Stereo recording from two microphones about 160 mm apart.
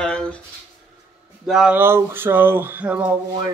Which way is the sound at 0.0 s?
5° left (ahead or behind).